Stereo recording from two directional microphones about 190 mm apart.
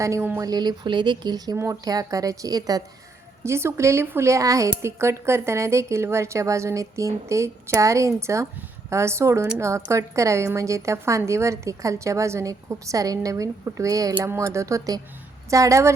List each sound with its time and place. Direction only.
0.0 s a woman's voice: 15° right (ahead or behind)